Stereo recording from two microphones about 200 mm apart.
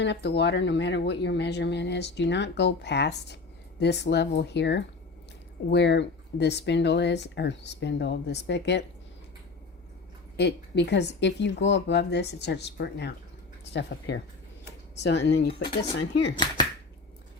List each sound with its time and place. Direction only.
0.0 s speech: 60° left (ahead or behind)
10.3 s speech: 60° left (ahead or behind)